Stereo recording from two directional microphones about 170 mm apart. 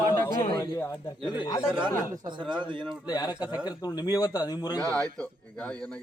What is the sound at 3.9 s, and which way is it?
Speech, 20° left (ahead or behind).